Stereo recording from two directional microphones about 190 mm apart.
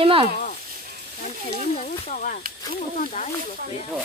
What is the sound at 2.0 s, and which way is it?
Speech, 45° left (ahead or behind).